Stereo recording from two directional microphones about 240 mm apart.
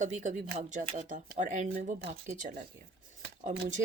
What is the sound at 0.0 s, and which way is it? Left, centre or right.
Speech, right.